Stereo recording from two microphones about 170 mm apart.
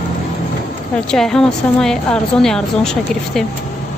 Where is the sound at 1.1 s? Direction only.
5° left (ahead or behind).